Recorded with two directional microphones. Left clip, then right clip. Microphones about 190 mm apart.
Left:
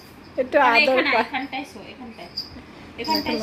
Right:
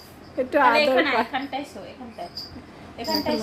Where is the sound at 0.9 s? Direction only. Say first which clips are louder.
Left 1 dB; 25° right (ahead or behind).